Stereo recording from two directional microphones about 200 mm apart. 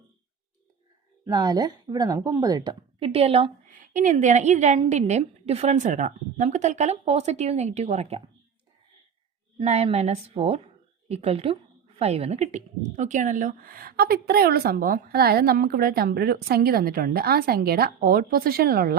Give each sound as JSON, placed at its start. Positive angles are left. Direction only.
{"t": 1.2, "sound": "speech", "side_deg": -20}
{"t": 3.7, "sound": "a woman's voice", "side_deg": -40}
{"t": 9.6, "sound": "a woman's voice", "side_deg": -30}